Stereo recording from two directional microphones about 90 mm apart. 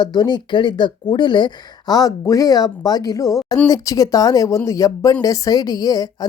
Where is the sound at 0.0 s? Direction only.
50° left (ahead or behind).